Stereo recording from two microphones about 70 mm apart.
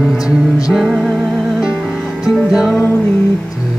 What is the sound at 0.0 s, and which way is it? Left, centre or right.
Music, centre.